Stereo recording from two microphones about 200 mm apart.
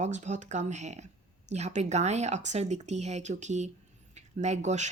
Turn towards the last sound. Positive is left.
turn(degrees=-35)  # may be behind; listen again after turning